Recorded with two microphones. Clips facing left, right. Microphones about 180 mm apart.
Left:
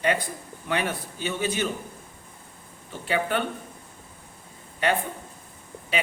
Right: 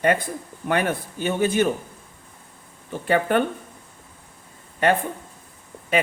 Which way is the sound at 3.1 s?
50° right (ahead or behind).